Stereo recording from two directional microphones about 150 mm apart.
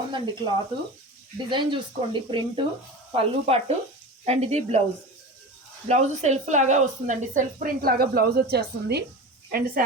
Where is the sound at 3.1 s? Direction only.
40° right (ahead or behind).